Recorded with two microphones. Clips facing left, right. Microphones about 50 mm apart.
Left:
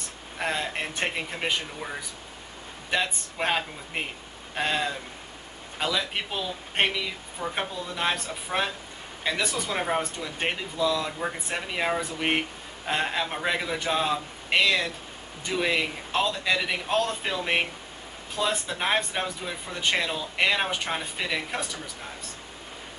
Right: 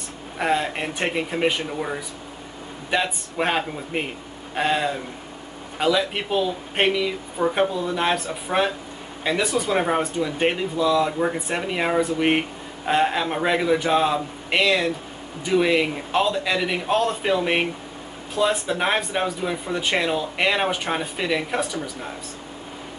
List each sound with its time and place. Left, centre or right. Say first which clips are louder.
0.4 s speech: right 6 dB; centre
7.4 s speech: right 10 dB; right
7.9 s speech: right 5 dB; centre